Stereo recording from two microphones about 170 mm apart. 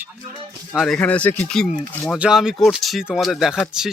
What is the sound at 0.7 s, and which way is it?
Speech, centre (ahead or behind).